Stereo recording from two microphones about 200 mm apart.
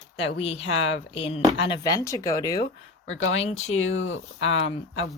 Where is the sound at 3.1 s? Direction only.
75° left (ahead or behind).